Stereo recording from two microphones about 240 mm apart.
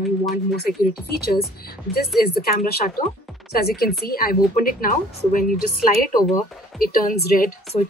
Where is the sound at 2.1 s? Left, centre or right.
Left.